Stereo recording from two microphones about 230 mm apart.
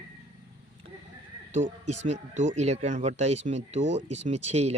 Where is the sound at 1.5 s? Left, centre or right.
Right.